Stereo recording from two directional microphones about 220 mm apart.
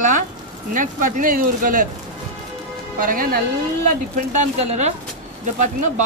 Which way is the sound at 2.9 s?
40° right (ahead or behind).